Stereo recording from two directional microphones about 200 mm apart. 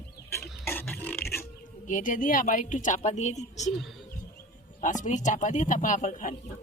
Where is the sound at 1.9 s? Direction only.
40° left (ahead or behind).